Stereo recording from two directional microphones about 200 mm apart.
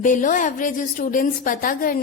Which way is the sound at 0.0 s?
40° left (ahead or behind).